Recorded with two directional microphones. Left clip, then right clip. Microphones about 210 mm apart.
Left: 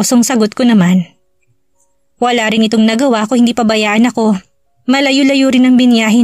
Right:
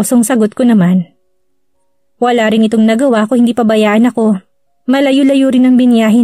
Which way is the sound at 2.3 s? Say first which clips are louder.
Right 3 dB; 50° left (ahead or behind).